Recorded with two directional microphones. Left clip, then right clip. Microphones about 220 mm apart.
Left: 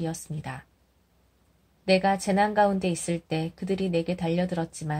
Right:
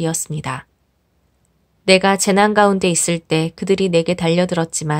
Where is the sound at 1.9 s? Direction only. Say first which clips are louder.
Right 10 dB; 35° right (ahead or behind).